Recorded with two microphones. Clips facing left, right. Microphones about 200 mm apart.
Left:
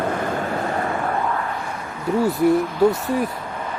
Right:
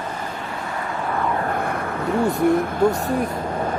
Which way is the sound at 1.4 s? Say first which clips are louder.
Right 5 dB; 55° right (ahead or behind).